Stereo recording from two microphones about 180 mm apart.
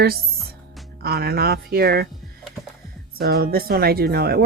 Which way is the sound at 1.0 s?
60° right (ahead or behind).